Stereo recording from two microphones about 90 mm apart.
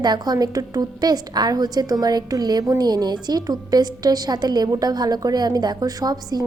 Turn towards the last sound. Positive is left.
turn(degrees=-45)  # may be behind; listen again after turning